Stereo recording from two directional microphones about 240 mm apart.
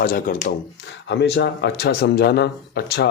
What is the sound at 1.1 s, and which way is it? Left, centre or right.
Speech, left.